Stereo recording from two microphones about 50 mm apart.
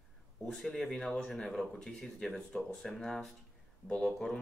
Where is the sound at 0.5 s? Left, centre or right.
Centre.